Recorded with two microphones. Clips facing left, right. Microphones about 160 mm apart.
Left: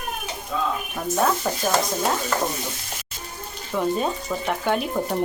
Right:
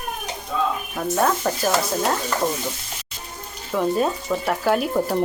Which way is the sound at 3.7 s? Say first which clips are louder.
Right 2 dB; centre (ahead or behind).